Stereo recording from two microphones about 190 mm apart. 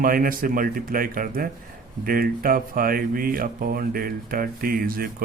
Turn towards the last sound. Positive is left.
turn(degrees=-50)  # may be behind; listen again after turning